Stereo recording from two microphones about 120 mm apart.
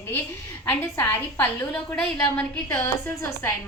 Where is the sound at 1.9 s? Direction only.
10° left (ahead or behind).